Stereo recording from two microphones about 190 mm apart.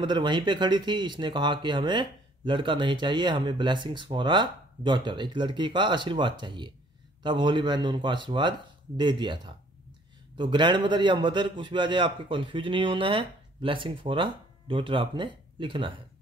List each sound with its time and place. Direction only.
0.0 s speech: 25° right (ahead or behind)